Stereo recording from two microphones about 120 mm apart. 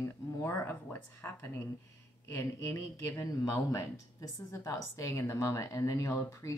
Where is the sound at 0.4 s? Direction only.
20° left (ahead or behind).